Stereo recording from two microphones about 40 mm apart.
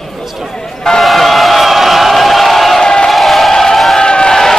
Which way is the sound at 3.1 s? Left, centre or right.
Centre.